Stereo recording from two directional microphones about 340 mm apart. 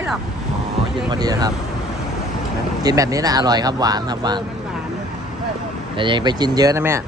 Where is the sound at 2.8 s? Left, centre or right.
Centre.